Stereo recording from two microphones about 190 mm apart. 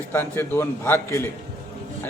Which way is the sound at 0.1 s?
10° left (ahead or behind).